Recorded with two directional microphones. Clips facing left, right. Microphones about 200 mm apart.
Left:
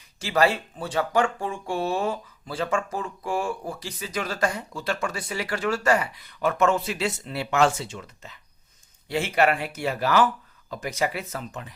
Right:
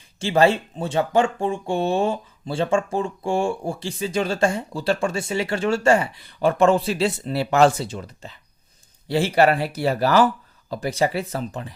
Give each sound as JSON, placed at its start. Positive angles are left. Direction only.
{"t": 0.2, "sound": "speech", "side_deg": -25}